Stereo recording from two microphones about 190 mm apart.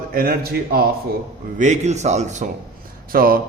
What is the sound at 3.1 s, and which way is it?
Speech, 50° right (ahead or behind).